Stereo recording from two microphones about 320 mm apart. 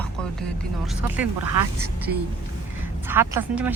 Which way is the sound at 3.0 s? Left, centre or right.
Centre.